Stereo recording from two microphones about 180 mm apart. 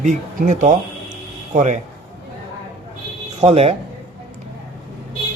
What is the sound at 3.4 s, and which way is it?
Speech, 35° right (ahead or behind).